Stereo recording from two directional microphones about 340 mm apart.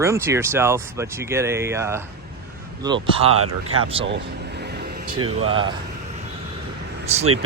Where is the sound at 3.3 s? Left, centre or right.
Right.